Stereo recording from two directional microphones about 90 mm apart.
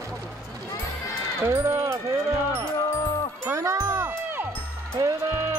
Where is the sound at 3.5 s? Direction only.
30° right (ahead or behind).